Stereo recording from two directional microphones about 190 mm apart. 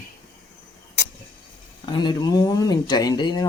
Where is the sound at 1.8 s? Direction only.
25° left (ahead or behind).